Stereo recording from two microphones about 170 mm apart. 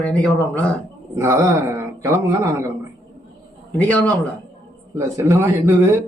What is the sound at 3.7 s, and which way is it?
Speech, 10° left (ahead or behind).